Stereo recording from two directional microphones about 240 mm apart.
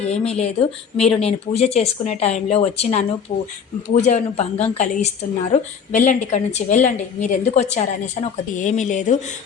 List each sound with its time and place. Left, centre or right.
0.0 s a woman's voice: left